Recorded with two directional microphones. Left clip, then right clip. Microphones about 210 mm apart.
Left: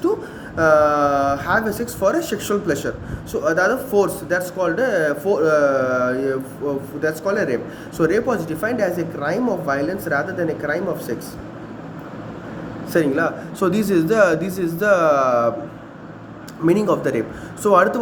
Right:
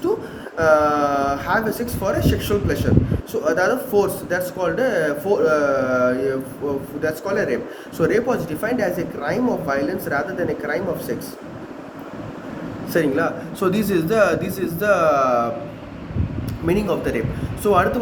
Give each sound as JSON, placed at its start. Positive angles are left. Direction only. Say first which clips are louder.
{"t": 0.5, "sound": "speech", "louder": "left 1 dB", "side_deg": 55}
{"t": 12.9, "sound": "speech", "louder": "left 1 dB", "side_deg": 55}
{"t": 16.6, "sound": "speech", "louder": "left 3 dB", "side_deg": 60}